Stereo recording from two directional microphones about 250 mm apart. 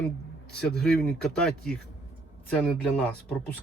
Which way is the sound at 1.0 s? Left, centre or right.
Centre.